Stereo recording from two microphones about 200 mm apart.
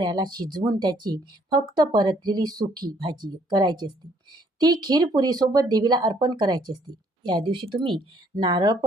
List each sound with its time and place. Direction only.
0.0 s speech: 20° right (ahead or behind)